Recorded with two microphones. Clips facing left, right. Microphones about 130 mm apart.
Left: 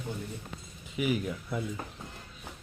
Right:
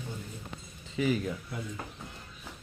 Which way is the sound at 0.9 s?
10° left (ahead or behind).